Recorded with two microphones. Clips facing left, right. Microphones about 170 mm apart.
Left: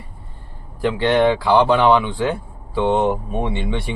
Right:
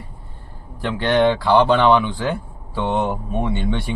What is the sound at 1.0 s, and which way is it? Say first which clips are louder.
Speech: even; 10° left (ahead or behind).